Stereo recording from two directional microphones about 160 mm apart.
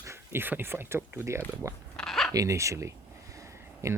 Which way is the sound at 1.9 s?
5° left (ahead or behind).